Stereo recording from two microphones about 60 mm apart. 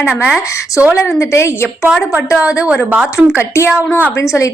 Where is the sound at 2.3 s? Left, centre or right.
Centre.